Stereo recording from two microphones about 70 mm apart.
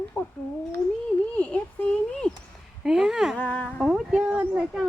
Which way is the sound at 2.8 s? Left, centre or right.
Centre.